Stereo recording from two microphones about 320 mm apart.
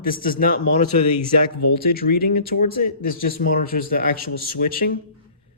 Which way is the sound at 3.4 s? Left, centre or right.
Left.